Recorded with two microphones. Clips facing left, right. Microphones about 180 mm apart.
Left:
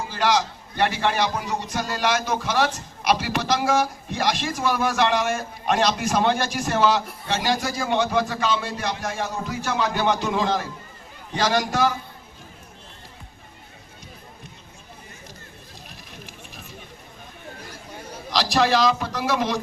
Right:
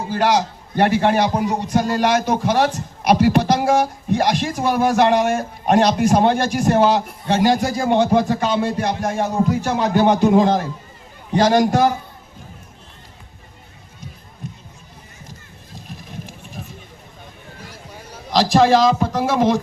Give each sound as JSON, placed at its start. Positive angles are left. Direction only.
{"t": 0.1, "sound": "a man's voice", "side_deg": -55}
{"t": 18.3, "sound": "a man's voice", "side_deg": -50}